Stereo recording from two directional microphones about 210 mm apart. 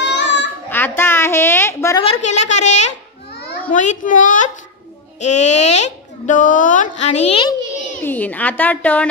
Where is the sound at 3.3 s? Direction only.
50° left (ahead or behind).